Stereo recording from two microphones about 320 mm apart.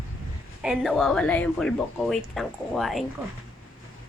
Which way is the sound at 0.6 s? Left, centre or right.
Centre.